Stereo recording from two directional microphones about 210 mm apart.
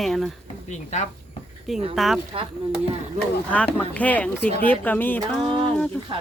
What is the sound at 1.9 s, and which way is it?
Speech, centre (ahead or behind).